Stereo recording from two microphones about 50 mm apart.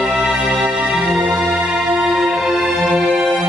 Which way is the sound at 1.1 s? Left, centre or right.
Centre.